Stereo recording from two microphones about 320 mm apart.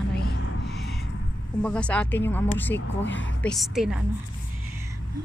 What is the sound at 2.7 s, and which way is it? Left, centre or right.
Speech, left.